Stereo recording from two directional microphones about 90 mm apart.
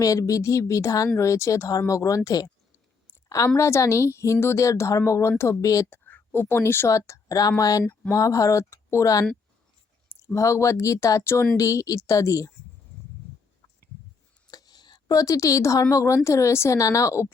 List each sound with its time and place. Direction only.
0.0 s a woman's voice: 40° left (ahead or behind)
5.9 s speech: 25° left (ahead or behind)
14.5 s a woman's voice: 45° left (ahead or behind)